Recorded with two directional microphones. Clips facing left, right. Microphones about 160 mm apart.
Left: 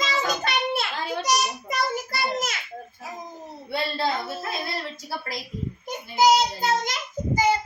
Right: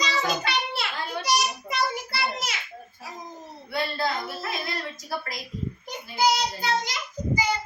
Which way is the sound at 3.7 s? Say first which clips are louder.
Left 1 dB; 30° left (ahead or behind).